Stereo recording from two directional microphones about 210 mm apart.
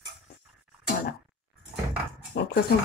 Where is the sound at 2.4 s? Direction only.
55° left (ahead or behind).